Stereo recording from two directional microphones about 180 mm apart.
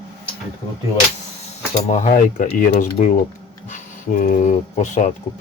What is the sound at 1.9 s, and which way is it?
Speech, 45° left (ahead or behind).